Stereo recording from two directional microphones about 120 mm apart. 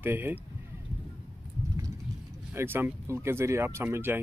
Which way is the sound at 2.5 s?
20° right (ahead or behind).